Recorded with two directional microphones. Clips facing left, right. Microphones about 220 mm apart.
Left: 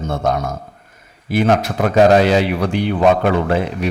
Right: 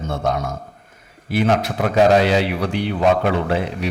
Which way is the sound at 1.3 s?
45° left (ahead or behind).